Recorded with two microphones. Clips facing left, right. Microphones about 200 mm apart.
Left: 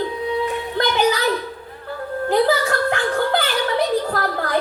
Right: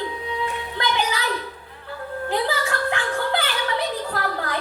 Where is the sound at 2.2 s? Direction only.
40° left (ahead or behind).